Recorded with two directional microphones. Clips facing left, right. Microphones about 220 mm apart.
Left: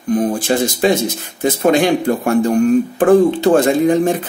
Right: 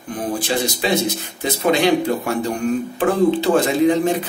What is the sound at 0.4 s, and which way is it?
Speech, 45° left (ahead or behind).